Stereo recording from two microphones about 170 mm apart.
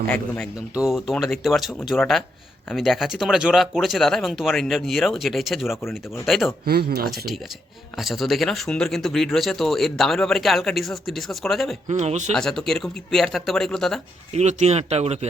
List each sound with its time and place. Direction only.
0.7 s speech: 5° right (ahead or behind)
6.7 s speech: 65° right (ahead or behind)
7.9 s speech: centre (ahead or behind)
11.9 s a man's voice: 40° right (ahead or behind)
12.3 s speech: 5° left (ahead or behind)
14.3 s speech: 40° right (ahead or behind)